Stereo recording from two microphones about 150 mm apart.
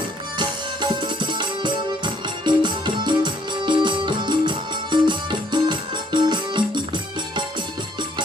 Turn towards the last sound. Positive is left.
turn(degrees=-30)  # may be behind; listen again after turning